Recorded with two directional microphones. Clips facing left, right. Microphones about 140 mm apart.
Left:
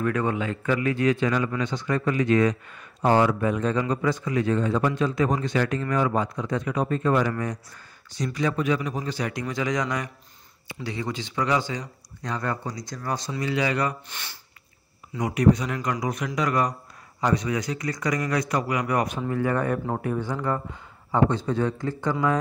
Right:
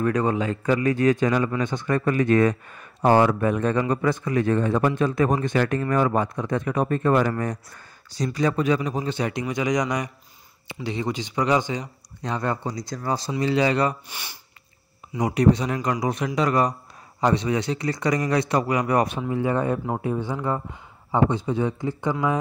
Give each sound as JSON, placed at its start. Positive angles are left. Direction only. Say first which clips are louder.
{"t": 0.0, "sound": "speech", "louder": "right 3 dB", "side_deg": -35}
{"t": 8.1, "sound": "a man's voice", "louder": "right 3 dB", "side_deg": -35}
{"t": 14.0, "sound": "speech", "louder": "right 1 dB", "side_deg": -10}
{"t": 15.2, "sound": "a man's voice", "louder": "right 1 dB", "side_deg": -30}